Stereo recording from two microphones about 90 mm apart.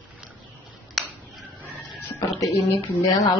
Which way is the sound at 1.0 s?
Centre (ahead or behind).